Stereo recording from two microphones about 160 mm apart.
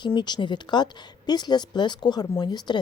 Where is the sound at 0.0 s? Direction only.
30° left (ahead or behind).